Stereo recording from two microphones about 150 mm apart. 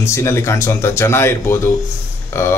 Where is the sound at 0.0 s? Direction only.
20° left (ahead or behind).